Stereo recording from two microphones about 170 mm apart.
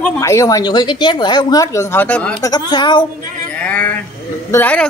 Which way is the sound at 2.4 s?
25° left (ahead or behind).